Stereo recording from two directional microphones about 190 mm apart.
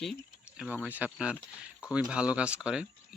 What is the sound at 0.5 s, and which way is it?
Speech, 5° right (ahead or behind).